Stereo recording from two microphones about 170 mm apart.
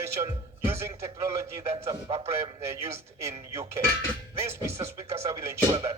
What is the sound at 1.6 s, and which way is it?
Speech, 35° right (ahead or behind).